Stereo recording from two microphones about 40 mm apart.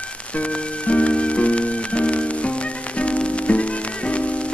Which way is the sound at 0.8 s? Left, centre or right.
Left.